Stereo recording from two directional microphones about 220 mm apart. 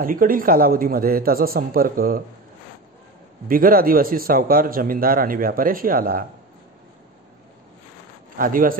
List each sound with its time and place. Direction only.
0.0 s a man's voice: 40° right (ahead or behind)
3.4 s a man's voice: 40° right (ahead or behind)
8.4 s a man's voice: 40° right (ahead or behind)